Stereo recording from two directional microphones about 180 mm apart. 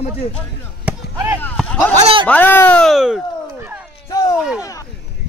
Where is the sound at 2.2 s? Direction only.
10° left (ahead or behind).